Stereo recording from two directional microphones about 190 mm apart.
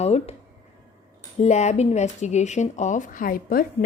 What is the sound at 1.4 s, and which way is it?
A woman's voice, 35° left (ahead or behind).